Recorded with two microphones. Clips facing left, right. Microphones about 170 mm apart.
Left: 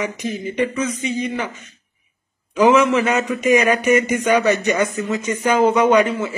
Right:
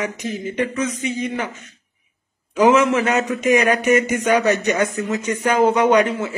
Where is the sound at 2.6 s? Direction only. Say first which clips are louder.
Left 1 dB; 15° right (ahead or behind).